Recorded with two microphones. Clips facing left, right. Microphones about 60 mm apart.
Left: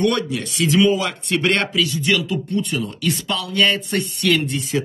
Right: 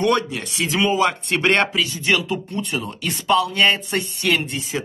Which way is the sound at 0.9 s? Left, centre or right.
Centre.